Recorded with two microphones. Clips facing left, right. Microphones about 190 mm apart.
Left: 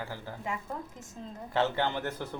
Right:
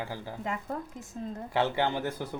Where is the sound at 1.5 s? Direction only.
15° right (ahead or behind).